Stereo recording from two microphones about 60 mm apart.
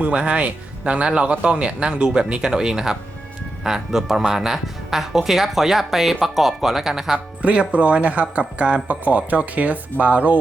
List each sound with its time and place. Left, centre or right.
0.0 s speech: right
7.4 s speech: right